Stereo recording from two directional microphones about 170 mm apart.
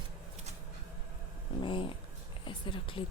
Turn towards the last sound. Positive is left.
turn(degrees=30)  # may be behind; listen again after turning